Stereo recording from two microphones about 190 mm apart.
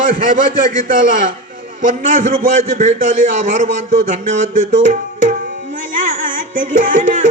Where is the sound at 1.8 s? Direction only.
45° right (ahead or behind).